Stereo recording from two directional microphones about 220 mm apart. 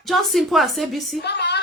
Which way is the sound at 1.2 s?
50° left (ahead or behind).